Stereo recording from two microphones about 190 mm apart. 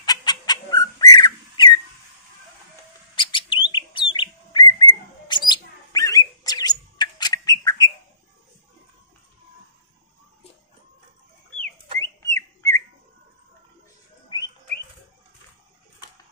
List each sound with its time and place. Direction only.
0.0 s bird: 20° left (ahead or behind)
3.2 s bird: 25° left (ahead or behind)
12.0 s whistling: 15° left (ahead or behind)